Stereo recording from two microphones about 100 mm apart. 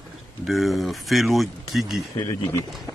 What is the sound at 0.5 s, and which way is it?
Speech, centre (ahead or behind).